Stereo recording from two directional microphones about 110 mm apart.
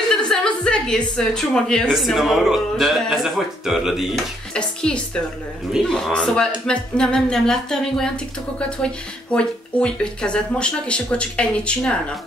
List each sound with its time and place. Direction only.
0.1 s music: 5° left (ahead or behind)
1.1 s speech: 5° left (ahead or behind)
4.6 s speech: 10° left (ahead or behind)